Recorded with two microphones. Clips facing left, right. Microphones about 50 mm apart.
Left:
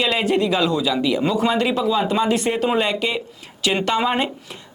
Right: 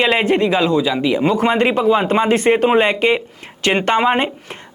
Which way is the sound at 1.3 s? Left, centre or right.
Right.